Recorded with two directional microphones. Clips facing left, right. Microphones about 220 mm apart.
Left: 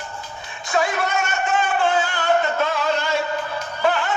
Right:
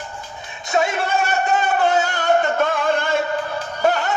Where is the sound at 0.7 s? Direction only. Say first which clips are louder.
Right 2 dB; 25° right (ahead or behind).